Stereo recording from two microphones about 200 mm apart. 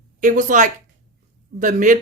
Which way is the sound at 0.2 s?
40° right (ahead or behind).